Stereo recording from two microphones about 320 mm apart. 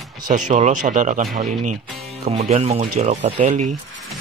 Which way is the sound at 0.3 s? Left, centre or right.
Right.